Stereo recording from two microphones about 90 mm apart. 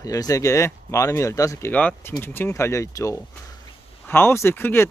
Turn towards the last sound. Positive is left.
turn(degrees=25)  # may be behind; listen again after turning